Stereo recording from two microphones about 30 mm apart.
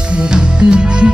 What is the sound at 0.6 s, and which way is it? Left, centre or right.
Music, right.